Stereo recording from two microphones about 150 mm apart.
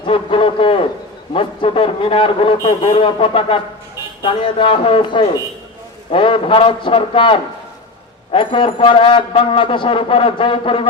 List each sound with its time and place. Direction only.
0.0 s a man's voice: 35° left (ahead or behind)